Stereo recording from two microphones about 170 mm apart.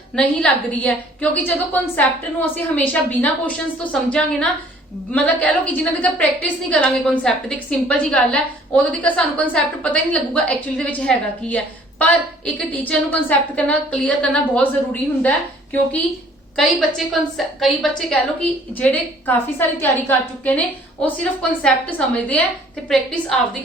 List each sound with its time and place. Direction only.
0.2 s a woman's voice: 5° left (ahead or behind)
17.1 s a woman's voice: centre (ahead or behind)